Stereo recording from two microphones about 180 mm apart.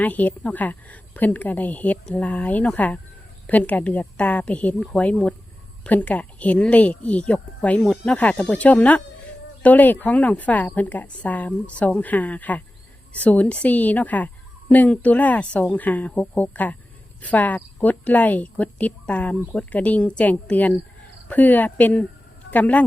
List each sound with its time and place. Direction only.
0.0 s speech: 10° left (ahead or behind)